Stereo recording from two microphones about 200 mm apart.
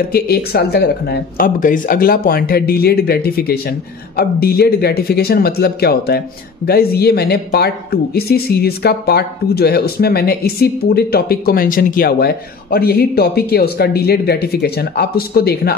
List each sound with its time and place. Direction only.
0.1 s speech: 50° left (ahead or behind)